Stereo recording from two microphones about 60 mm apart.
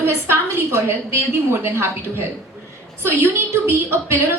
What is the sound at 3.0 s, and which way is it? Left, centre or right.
A woman's voice, right.